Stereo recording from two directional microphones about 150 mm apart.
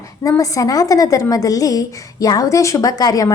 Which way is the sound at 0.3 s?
20° left (ahead or behind).